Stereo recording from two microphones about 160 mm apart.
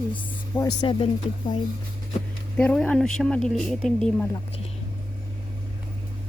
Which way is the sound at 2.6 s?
10° left (ahead or behind).